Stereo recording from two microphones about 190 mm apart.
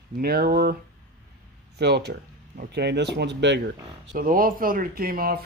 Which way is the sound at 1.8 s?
60° right (ahead or behind).